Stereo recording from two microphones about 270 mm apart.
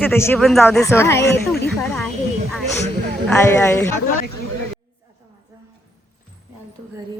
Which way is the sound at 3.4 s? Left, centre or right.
Centre.